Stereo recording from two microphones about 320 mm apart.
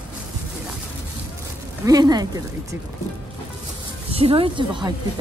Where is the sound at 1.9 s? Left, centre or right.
Centre.